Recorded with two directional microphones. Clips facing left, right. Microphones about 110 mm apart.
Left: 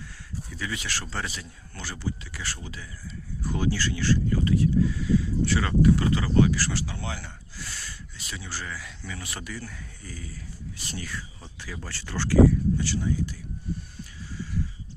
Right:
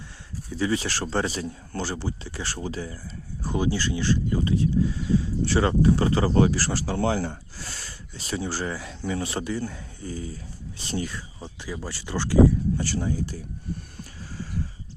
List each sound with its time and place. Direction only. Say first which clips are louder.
0.5 s speech: right 9 dB; 30° right (ahead or behind)
3.4 s speech: right 2 dB; 20° right (ahead or behind)
12.7 s speech: right 1 dB; 40° right (ahead or behind)